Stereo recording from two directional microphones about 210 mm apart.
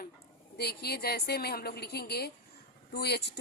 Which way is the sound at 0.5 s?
50° left (ahead or behind).